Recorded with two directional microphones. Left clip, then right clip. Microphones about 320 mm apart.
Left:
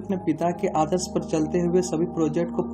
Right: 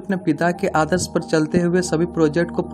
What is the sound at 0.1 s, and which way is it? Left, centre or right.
Speech, right.